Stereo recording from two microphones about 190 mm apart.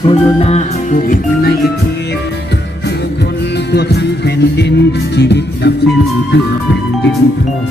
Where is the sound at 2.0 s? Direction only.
60° left (ahead or behind).